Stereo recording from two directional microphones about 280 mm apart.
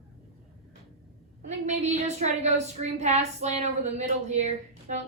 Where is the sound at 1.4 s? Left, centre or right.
Right.